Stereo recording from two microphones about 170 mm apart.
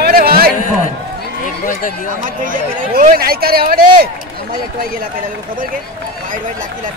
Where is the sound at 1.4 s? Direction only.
50° left (ahead or behind).